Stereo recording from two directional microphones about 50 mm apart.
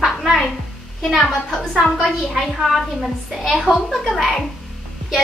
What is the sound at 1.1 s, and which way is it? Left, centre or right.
A woman's voice, centre.